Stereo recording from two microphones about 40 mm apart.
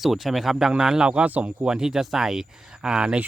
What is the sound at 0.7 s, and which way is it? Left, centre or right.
Speech, centre.